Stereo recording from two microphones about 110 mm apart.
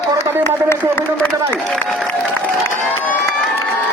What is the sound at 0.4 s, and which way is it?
Speech, 20° left (ahead or behind).